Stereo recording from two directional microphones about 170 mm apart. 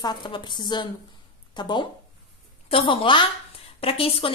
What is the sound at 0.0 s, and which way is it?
A woman's voice, 25° left (ahead or behind).